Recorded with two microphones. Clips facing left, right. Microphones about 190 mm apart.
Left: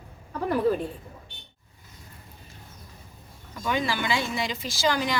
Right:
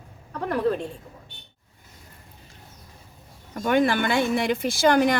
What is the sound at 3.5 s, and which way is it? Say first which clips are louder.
Speech: right 7 dB; 55° right (ahead or behind).